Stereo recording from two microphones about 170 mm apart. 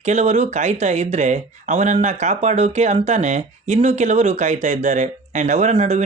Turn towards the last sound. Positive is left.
turn(degrees=-40)  # may be behind; listen again after turning